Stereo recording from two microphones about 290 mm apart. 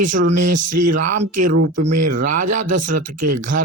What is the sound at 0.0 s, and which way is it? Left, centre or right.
Speech, right.